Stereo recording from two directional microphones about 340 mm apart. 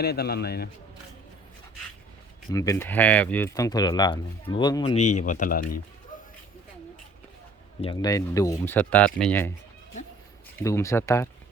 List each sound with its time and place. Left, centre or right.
0.0 s a man's voice: left
2.5 s speech: centre; by 5.8 s left
7.8 s speech: centre
10.6 s speech: centre